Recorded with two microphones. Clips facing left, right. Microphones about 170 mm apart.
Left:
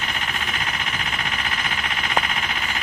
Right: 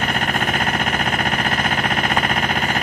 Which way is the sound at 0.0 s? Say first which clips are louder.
Right 9 dB; 50° right (ahead or behind).